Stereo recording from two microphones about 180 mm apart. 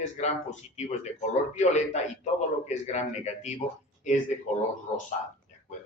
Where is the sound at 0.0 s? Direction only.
40° left (ahead or behind).